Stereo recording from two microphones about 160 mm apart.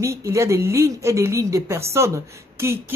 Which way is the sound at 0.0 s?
20° right (ahead or behind).